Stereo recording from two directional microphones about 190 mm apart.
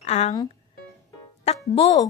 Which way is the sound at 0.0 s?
35° left (ahead or behind).